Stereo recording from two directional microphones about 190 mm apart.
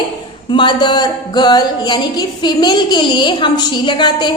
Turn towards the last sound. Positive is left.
turn(degrees=25)  # may be behind; listen again after turning